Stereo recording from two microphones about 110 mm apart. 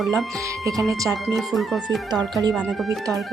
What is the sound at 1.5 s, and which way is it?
Speech, centre (ahead or behind).